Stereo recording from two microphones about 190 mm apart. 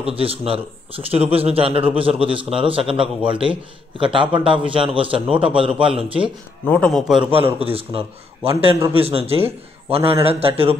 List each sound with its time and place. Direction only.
0.1 s speech: 30° right (ahead or behind)
6.6 s a man's voice: 5° left (ahead or behind)
7.2 s a man's voice: 30° right (ahead or behind)